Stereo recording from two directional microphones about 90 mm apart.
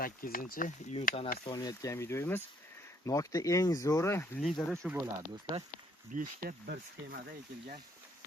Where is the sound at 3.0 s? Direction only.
40° left (ahead or behind).